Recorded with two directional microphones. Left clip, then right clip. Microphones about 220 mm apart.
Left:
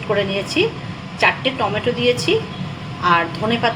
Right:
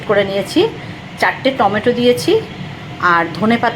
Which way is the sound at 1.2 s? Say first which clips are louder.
Right 3 dB; 25° right (ahead or behind).